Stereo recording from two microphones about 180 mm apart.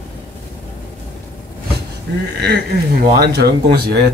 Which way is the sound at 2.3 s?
65° right (ahead or behind).